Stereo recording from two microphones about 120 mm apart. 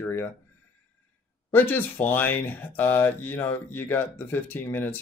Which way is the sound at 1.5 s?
15° left (ahead or behind).